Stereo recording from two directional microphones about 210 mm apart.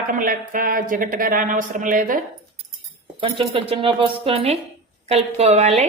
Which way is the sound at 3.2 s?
25° right (ahead or behind).